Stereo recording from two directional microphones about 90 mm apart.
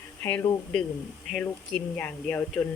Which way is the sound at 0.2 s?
25° left (ahead or behind).